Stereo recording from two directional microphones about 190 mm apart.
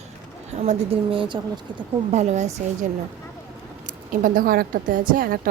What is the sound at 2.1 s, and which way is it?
Speech, 35° right (ahead or behind).